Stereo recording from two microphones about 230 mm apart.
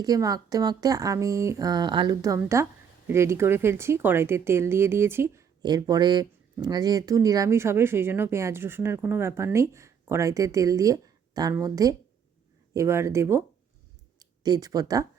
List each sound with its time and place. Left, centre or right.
0.0 s speech: centre